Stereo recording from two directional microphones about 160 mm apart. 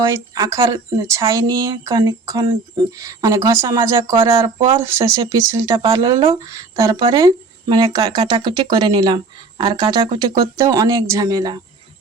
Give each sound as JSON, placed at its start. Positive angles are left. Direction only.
{"t": 0.1, "sound": "speech", "side_deg": -20}
{"t": 4.2, "sound": "speech", "side_deg": -35}